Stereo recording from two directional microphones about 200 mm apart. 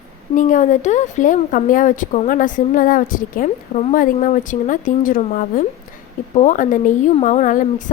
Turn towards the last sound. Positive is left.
turn(degrees=40)  # may be behind; listen again after turning